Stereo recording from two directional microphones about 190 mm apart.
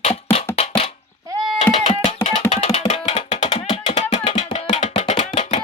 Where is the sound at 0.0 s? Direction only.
35° left (ahead or behind).